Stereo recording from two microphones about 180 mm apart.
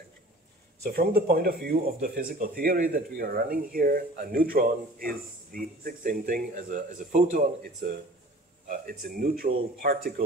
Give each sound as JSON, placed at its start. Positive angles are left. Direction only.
{"t": 0.8, "sound": "speech", "side_deg": -55}